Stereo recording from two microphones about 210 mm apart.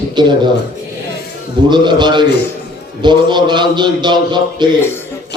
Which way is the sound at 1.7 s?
20° right (ahead or behind).